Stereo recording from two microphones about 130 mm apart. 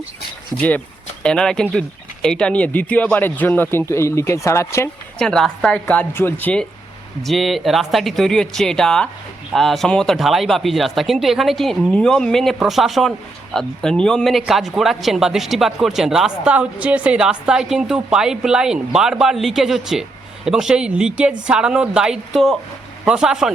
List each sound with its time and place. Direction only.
1.2 s speech: 5° left (ahead or behind)
5.2 s a woman's voice: 5° left (ahead or behind)